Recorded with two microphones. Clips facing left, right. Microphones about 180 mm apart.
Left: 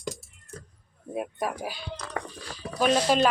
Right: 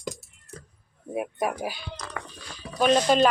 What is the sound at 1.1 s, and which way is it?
Speech, 10° right (ahead or behind).